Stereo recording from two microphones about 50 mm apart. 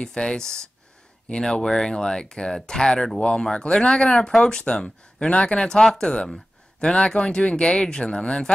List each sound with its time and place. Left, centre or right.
0.0 s speech: centre